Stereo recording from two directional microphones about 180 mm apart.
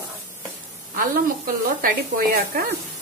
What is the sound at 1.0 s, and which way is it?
Speech, 55° right (ahead or behind).